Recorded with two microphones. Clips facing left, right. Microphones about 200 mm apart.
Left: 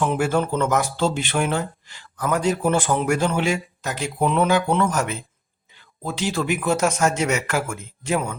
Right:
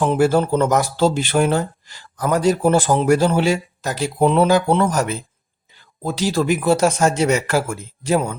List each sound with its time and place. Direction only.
0.0 s speech: 35° right (ahead or behind)